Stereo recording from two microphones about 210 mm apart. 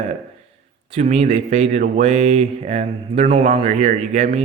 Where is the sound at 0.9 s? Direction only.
30° right (ahead or behind).